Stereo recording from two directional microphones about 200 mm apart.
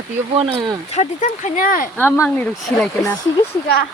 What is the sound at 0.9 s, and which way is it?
Speech, 35° left (ahead or behind).